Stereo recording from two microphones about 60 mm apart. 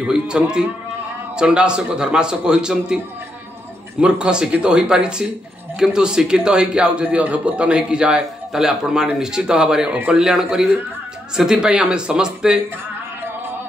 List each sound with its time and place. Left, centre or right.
0.1 s a man's voice: centre
4.0 s a man's voice: centre